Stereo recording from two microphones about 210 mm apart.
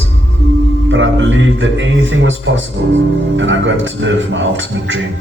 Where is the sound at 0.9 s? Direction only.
65° right (ahead or behind).